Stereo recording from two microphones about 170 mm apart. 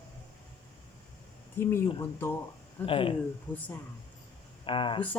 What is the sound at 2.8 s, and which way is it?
Speech, 30° left (ahead or behind).